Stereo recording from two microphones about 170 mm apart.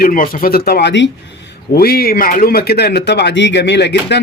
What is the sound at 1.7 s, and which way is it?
A man's voice, 65° left (ahead or behind).